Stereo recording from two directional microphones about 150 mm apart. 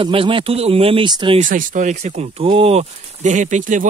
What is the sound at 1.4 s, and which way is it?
Speech, 60° right (ahead or behind).